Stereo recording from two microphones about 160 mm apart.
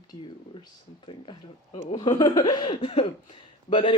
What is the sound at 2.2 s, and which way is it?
A man's voice, 25° left (ahead or behind).